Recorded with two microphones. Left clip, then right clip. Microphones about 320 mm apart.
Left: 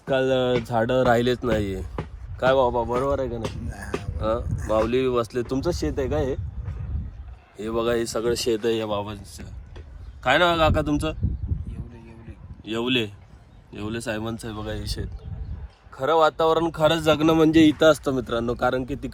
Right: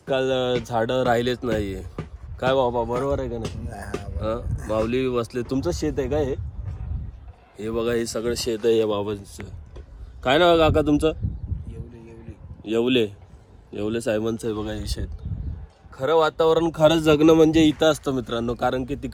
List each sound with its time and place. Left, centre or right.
1.0 s a man's voice: centre
3.7 s speech: right
4.2 s a man's voice: centre
7.5 s a man's voice: centre
12.6 s a man's voice: centre